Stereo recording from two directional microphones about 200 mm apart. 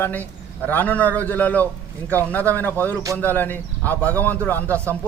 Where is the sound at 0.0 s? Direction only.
10° left (ahead or behind).